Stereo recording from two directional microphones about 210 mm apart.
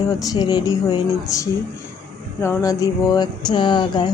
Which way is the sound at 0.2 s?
15° left (ahead or behind).